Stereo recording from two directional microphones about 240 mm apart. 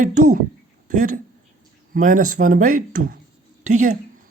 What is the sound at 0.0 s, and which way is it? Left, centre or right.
Speech, right.